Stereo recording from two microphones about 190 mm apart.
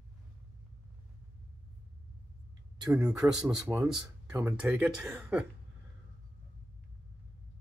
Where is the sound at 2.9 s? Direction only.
5° right (ahead or behind).